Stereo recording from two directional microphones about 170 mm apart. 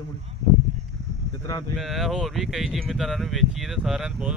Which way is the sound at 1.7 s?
Centre (ahead or behind).